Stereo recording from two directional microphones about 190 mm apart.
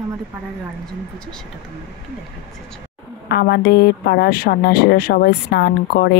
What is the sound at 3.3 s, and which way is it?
Speech, 60° left (ahead or behind).